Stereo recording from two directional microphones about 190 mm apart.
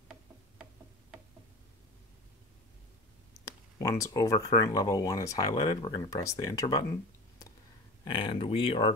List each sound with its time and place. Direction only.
3.8 s speech: 20° left (ahead or behind)
8.0 s speech: 25° left (ahead or behind)